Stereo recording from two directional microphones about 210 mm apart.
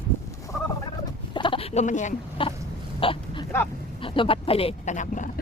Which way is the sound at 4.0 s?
25° left (ahead or behind).